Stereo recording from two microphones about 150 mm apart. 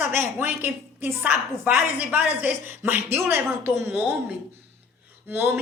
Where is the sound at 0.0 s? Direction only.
15° right (ahead or behind).